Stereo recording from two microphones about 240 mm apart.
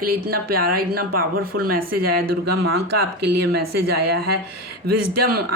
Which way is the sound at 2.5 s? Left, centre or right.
Right.